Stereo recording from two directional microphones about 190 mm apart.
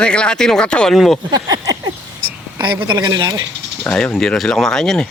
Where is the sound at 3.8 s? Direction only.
5° left (ahead or behind).